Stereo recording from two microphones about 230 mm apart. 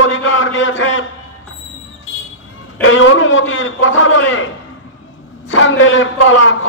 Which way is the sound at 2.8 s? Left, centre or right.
Left.